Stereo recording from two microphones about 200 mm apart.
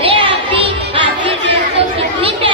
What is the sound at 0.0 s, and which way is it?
Music, 25° right (ahead or behind).